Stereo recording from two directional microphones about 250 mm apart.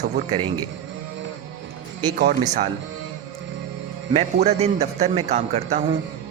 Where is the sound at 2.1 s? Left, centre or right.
Right.